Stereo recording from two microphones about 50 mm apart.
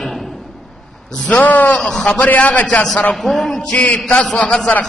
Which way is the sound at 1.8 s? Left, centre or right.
Centre.